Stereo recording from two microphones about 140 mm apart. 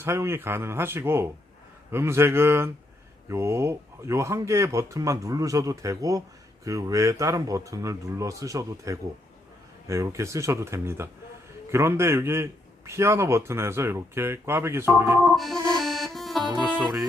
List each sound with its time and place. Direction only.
0.0 s a man's voice: 15° right (ahead or behind)
15.8 s music: centre (ahead or behind)
16.6 s speech: 10° right (ahead or behind)